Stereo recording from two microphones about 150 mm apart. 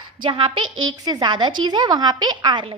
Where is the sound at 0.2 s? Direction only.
35° right (ahead or behind).